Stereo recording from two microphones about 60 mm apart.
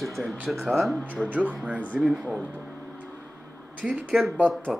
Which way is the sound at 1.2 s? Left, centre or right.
Right.